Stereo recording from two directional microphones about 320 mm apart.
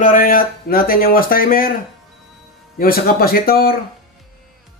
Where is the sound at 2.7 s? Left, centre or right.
Left.